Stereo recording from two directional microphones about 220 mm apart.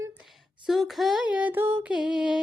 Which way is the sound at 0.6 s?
Centre (ahead or behind).